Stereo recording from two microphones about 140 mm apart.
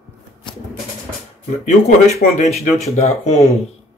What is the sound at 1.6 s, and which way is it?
Speech, 60° left (ahead or behind).